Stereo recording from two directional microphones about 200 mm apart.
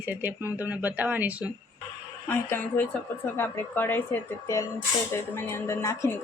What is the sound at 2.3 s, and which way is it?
Speech, 10° left (ahead or behind).